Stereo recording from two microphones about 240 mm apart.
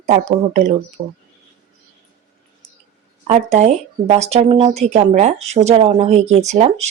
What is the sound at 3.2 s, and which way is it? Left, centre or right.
Speech, right.